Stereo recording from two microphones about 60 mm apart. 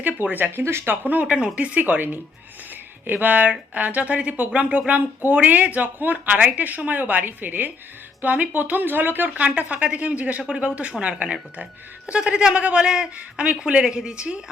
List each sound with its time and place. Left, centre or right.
0.0 s speech: right
0.6 s speech: right
1.0 s speech: right
1.3 s speech: centre